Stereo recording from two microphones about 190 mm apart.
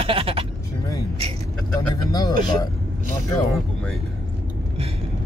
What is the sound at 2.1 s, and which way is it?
Speech, 20° left (ahead or behind).